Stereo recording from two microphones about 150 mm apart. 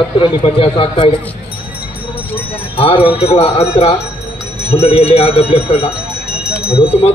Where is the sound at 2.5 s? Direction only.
40° left (ahead or behind).